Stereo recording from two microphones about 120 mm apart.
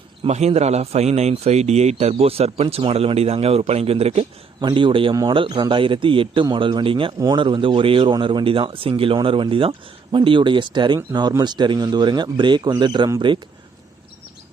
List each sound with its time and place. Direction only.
0.2 s a man's voice: 65° right (ahead or behind)
4.6 s a man's voice: 45° right (ahead or behind)